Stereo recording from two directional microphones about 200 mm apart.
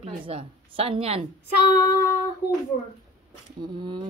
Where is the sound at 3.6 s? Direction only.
25° right (ahead or behind).